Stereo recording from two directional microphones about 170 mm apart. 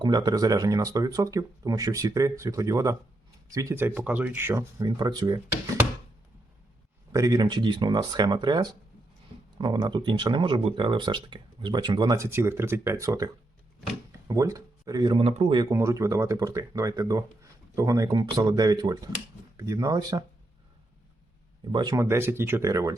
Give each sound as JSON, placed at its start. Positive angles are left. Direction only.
{"t": 0.0, "sound": "speech", "side_deg": -25}
{"t": 7.1, "sound": "speech", "side_deg": -20}
{"t": 15.7, "sound": "speech", "side_deg": -15}
{"t": 21.7, "sound": "speech", "side_deg": -25}